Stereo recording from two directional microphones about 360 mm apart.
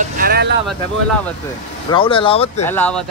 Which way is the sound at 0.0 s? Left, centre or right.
Right.